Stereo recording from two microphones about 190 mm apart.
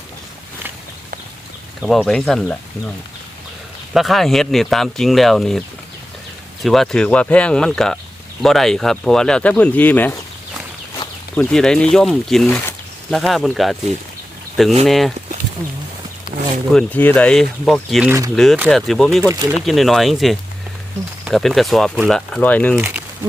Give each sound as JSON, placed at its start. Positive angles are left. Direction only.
{"t": 1.8, "sound": "speech", "side_deg": 0}
{"t": 3.9, "sound": "speech", "side_deg": 0}
{"t": 11.3, "sound": "speech", "side_deg": 5}
{"t": 14.8, "sound": "speech", "side_deg": 0}
{"t": 16.7, "sound": "speech", "side_deg": 10}
{"t": 19.3, "sound": "speech", "side_deg": -15}
{"t": 19.5, "sound": "speech", "side_deg": 0}